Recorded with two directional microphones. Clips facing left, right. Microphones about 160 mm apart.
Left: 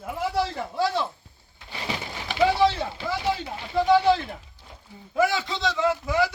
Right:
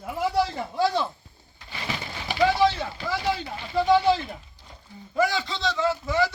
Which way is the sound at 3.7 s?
5° left (ahead or behind).